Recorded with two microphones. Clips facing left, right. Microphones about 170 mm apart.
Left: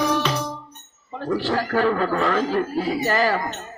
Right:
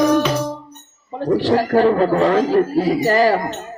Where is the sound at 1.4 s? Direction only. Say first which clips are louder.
Right 7 dB; 35° right (ahead or behind).